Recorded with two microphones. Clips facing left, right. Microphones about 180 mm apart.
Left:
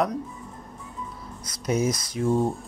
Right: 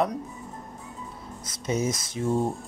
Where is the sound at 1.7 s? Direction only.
Centre (ahead or behind).